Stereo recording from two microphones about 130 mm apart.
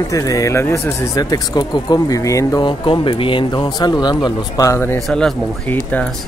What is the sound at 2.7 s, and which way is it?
Speech, 40° left (ahead or behind).